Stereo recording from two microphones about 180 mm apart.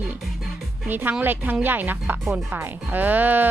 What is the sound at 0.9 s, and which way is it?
Speech, 10° right (ahead or behind).